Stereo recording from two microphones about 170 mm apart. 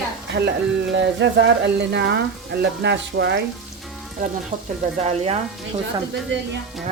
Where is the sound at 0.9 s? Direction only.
90° right.